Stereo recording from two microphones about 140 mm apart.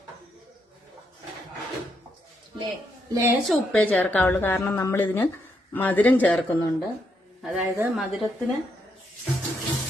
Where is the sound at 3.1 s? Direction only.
20° right (ahead or behind).